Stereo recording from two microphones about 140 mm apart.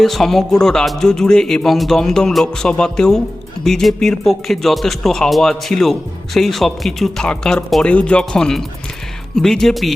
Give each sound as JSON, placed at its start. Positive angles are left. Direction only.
{"t": 0.0, "sound": "a man's voice", "side_deg": 0}